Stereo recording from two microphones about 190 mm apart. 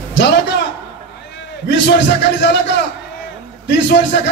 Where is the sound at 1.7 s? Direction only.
65° left (ahead or behind).